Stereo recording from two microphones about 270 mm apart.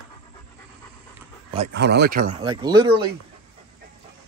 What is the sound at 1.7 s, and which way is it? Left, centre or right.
Speech, right.